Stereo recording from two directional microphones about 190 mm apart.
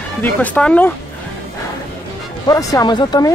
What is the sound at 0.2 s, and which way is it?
Speech, 5° left (ahead or behind).